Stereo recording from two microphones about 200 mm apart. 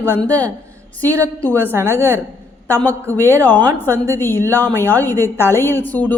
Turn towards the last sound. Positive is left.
turn(degrees=10)  # may be behind; listen again after turning